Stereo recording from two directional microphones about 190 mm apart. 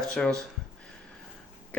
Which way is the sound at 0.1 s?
5° left (ahead or behind).